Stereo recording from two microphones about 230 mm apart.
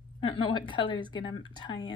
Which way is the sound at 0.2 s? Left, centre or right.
Left.